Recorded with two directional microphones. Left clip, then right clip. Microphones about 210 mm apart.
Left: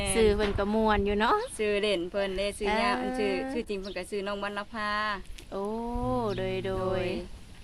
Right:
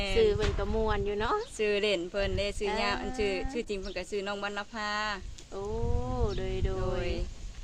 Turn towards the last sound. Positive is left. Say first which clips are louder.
# left 4 dB
turn(degrees=50)  # may be behind; listen again after turning